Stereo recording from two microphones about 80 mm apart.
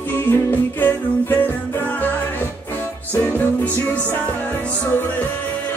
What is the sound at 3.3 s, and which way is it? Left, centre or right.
Music, left.